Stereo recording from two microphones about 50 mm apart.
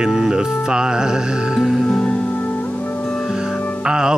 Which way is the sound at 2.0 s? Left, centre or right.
Centre.